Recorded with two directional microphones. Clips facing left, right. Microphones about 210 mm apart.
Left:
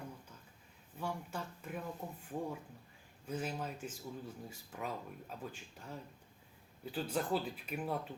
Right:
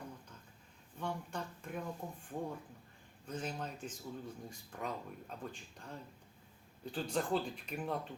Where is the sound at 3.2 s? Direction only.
5° left (ahead or behind).